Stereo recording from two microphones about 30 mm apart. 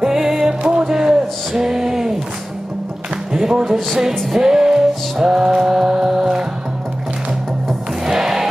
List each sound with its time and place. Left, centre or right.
0.0 s music: centre
1.5 s a sound: centre
3.3 s speech: right
4.4 s music: centre
8.0 s music: centre